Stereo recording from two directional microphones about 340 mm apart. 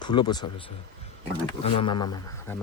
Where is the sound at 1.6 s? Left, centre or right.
Centre.